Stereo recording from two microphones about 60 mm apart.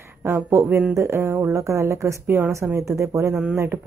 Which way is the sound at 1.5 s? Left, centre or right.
Right.